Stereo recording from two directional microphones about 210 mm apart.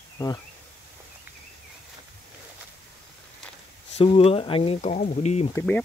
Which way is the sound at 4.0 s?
30° left (ahead or behind).